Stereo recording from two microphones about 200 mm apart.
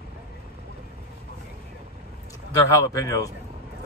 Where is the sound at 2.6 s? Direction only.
15° left (ahead or behind).